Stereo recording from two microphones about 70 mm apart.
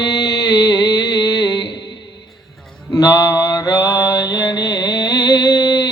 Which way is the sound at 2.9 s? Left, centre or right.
Left.